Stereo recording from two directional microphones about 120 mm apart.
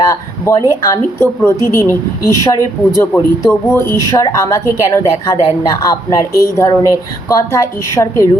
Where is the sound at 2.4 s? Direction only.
25° left (ahead or behind).